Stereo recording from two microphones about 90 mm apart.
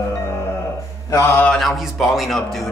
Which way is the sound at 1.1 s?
35° left (ahead or behind).